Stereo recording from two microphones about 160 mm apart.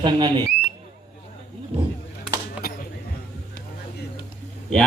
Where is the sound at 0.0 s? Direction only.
30° right (ahead or behind).